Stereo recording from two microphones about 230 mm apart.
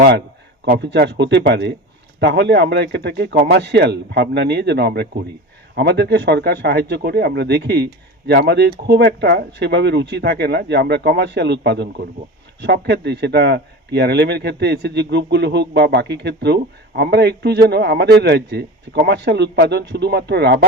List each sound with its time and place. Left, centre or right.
0.6 s speech: right